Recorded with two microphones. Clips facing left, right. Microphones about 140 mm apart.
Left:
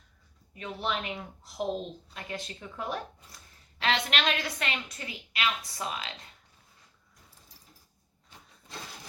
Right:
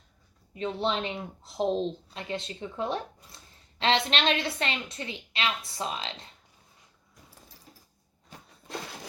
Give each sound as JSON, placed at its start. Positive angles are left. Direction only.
{"t": 0.5, "sound": "a woman's voice", "side_deg": -25}